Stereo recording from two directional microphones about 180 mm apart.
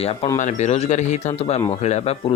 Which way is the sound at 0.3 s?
40° left (ahead or behind).